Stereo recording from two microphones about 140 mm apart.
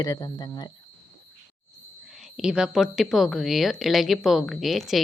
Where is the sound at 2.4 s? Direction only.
5° right (ahead or behind).